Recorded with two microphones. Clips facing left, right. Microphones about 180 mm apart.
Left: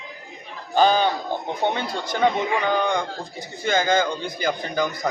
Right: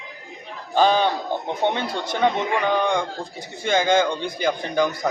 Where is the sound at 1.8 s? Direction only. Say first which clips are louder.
Right 1 dB; 25° right (ahead or behind).